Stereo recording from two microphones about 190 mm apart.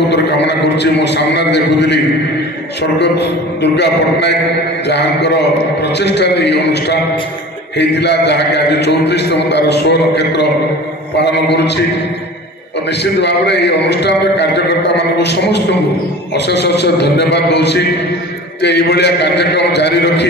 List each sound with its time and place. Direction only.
0.1 s a man's voice: 65° left (ahead or behind)
13.0 s a man's voice: 65° left (ahead or behind)